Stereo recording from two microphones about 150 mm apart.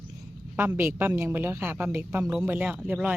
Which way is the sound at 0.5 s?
15° right (ahead or behind).